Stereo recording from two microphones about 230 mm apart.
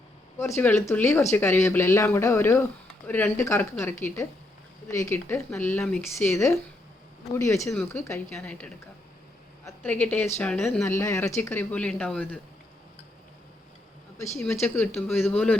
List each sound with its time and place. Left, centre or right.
0.3 s a woman's voice: centre
14.3 s speech: centre